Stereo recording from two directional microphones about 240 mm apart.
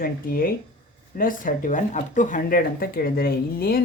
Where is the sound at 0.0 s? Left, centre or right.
Left.